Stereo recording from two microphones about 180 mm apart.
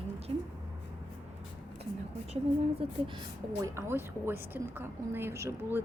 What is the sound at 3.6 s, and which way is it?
Speech, 15° right (ahead or behind).